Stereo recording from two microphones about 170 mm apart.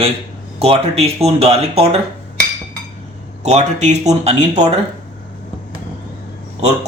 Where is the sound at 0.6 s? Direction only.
35° right (ahead or behind).